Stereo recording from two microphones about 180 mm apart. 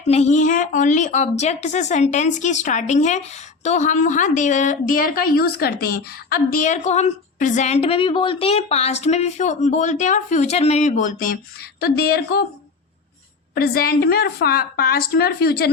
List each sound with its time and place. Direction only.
0.1 s a woman's voice: 40° left (ahead or behind)
11.8 s a woman's voice: 60° left (ahead or behind)
13.6 s a woman's voice: 55° left (ahead or behind)